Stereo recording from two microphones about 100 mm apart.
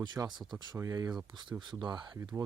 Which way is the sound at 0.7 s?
35° right (ahead or behind).